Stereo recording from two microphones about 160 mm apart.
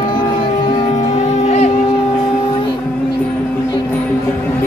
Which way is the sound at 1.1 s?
40° left (ahead or behind).